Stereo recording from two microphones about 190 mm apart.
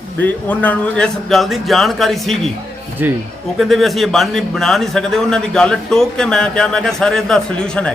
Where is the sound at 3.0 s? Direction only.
10° right (ahead or behind).